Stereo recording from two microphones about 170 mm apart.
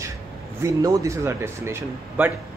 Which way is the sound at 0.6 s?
20° right (ahead or behind).